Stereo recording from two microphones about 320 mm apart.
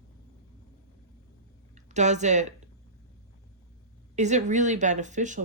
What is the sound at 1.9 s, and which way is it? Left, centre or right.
Speech, right.